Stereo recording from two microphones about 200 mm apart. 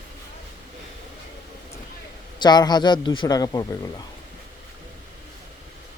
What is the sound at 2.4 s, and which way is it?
A man's voice, 20° left (ahead or behind).